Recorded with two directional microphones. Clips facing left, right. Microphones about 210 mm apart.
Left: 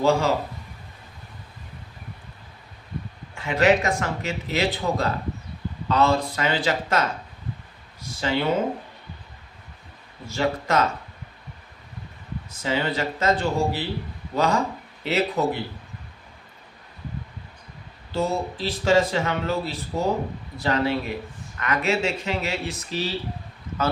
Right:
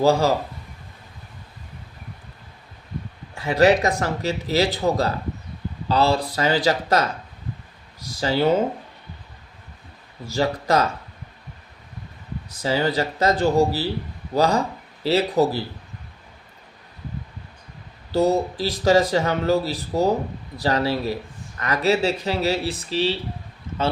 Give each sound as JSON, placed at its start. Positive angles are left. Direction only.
{"t": 0.0, "sound": "speech", "side_deg": -35}
{"t": 3.3, "sound": "speech", "side_deg": -35}
{"t": 10.2, "sound": "speech", "side_deg": -35}
{"t": 12.5, "sound": "speech", "side_deg": -35}
{"t": 18.1, "sound": "speech", "side_deg": -40}